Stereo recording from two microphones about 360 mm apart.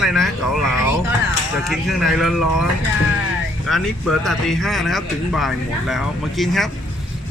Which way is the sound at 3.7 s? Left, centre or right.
Centre.